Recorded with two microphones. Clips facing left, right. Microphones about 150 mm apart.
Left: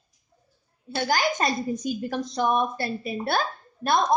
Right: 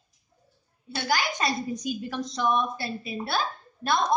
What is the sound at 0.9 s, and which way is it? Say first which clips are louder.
A child's voice: left 3 dB; 45° left (ahead or behind).